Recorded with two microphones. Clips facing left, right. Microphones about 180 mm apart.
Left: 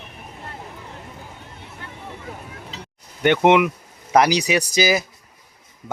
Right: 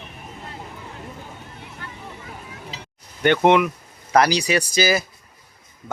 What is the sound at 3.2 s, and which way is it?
Speech, 15° left (ahead or behind).